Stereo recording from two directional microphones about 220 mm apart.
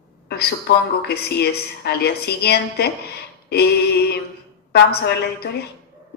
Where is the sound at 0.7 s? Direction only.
50° left (ahead or behind).